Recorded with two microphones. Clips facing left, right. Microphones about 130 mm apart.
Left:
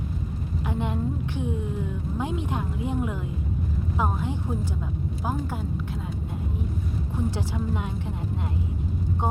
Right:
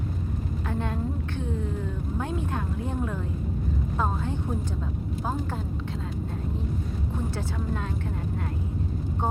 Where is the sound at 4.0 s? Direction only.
15° left (ahead or behind).